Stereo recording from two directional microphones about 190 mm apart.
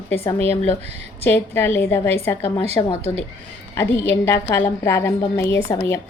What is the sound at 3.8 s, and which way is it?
A woman's voice, 10° left (ahead or behind).